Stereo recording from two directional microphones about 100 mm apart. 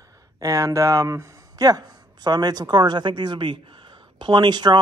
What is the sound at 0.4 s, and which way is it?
Speech, 35° right (ahead or behind).